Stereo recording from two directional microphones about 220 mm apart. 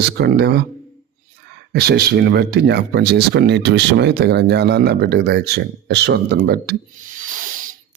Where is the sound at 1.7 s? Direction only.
45° right (ahead or behind).